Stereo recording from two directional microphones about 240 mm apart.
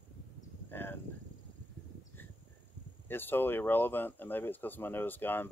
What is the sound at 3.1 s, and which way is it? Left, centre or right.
Speech, centre.